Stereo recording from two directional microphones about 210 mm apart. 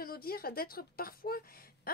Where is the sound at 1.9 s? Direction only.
45° left (ahead or behind).